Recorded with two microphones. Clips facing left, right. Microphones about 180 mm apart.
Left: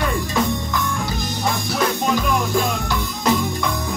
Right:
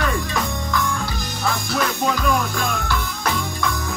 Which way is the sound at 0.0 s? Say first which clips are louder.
Left 2 dB; 20° left (ahead or behind).